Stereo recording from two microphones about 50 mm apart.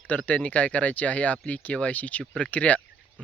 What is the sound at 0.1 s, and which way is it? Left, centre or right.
Speech, left.